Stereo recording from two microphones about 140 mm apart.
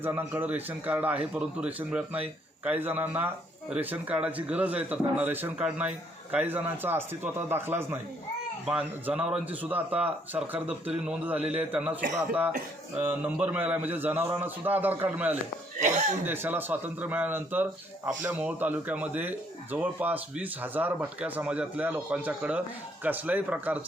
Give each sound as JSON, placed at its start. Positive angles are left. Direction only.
{"t": 0.0, "sound": "speech", "side_deg": -15}